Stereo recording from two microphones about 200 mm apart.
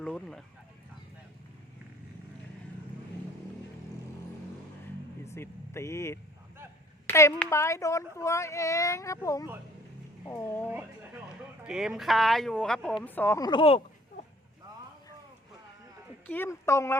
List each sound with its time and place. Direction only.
0.0 s a sound: 5° left (ahead or behind)
5.2 s speech: 15° left (ahead or behind)
10.7 s speech: 5° right (ahead or behind); by 13.8 s 30° left (ahead or behind)
16.2 s speech: 10° left (ahead or behind)